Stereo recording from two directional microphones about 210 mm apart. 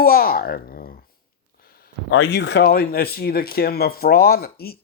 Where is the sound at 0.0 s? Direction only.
45° left (ahead or behind).